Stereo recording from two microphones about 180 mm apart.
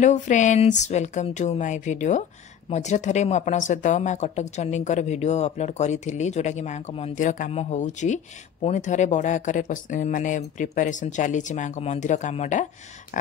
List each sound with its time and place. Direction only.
0.0 s speech: 40° left (ahead or behind)
7.2 s speech: 45° left (ahead or behind)